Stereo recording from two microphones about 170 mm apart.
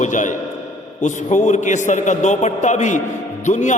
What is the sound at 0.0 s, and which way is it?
A man's voice, 45° left (ahead or behind).